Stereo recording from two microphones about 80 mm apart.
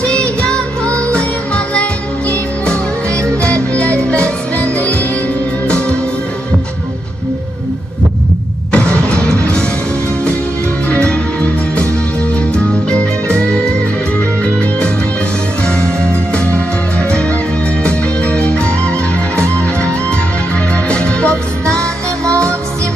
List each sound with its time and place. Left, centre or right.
0.0 s music: centre
8.7 s vehicle: centre
10.8 s music: centre
12.9 s music: centre
16.3 s music: centre